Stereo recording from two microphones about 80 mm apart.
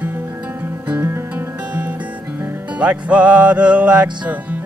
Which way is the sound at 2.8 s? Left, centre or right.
Centre.